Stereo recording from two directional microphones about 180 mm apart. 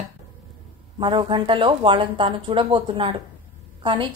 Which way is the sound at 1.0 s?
25° right (ahead or behind).